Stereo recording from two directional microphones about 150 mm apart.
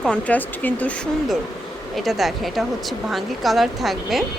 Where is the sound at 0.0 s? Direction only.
10° left (ahead or behind).